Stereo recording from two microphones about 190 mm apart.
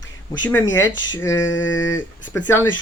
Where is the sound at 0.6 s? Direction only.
85° left.